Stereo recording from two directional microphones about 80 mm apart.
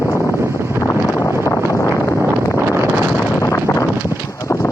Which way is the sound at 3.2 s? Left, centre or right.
Left.